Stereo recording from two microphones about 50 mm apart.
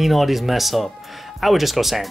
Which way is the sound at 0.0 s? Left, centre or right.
Centre.